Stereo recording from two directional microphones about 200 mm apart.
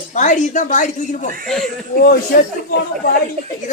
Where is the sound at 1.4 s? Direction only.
Centre (ahead or behind).